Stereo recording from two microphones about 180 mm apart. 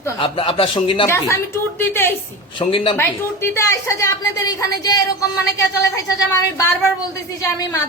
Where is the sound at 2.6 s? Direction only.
30° left (ahead or behind).